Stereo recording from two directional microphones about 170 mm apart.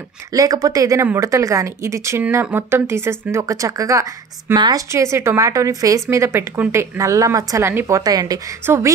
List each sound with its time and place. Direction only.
0.3 s speech: 20° right (ahead or behind)